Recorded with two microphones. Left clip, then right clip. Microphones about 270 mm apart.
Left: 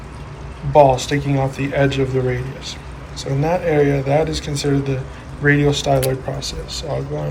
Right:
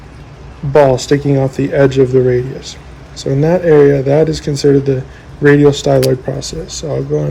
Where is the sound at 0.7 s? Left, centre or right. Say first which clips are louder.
Right 3 dB; right.